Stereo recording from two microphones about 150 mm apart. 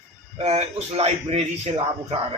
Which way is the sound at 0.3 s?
45° right (ahead or behind).